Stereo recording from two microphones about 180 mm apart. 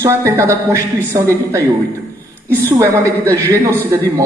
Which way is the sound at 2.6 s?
15° right (ahead or behind).